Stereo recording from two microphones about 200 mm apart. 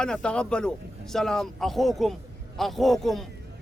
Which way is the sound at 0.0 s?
5° left (ahead or behind).